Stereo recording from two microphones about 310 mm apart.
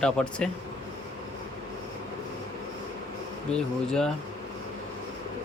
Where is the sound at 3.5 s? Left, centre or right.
Centre.